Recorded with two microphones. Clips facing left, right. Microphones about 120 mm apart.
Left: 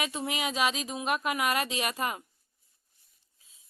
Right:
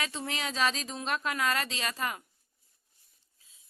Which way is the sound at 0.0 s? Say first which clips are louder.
Left 3 dB; 15° left (ahead or behind).